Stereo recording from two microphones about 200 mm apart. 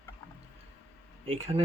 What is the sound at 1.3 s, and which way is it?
Speech, 30° right (ahead or behind).